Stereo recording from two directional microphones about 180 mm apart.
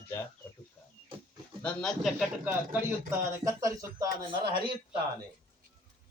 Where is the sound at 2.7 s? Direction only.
15° right (ahead or behind).